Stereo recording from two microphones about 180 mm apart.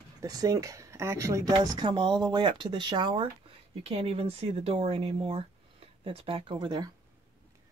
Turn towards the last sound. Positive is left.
turn(degrees=-25)  # may be behind; listen again after turning